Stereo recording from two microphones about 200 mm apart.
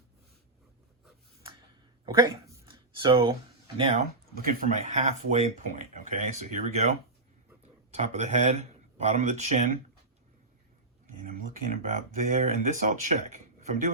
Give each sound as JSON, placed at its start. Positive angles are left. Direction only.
{"t": 2.0, "sound": "a sound", "side_deg": -20}
{"t": 3.8, "sound": "speech", "side_deg": -30}
{"t": 4.4, "sound": "speech", "side_deg": -40}
{"t": 12.3, "sound": "speech", "side_deg": -40}